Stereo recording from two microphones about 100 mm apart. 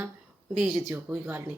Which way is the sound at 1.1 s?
20° right (ahead or behind).